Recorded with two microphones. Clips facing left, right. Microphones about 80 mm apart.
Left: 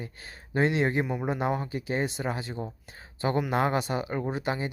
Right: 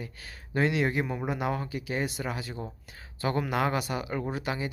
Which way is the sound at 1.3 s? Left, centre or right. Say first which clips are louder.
Left 2 dB; left.